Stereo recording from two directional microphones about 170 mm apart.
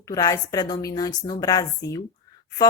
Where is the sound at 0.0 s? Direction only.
20° left (ahead or behind).